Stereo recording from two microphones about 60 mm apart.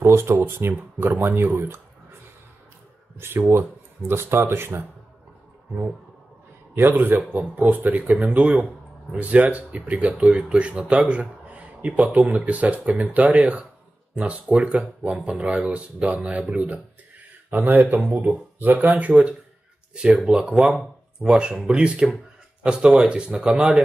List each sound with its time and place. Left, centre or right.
0.0 s a sound: right
0.4 s speech: right
3.2 s speech: right
6.7 s speech: right